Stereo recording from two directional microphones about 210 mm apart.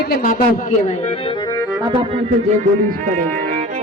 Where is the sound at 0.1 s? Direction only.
45° left (ahead or behind).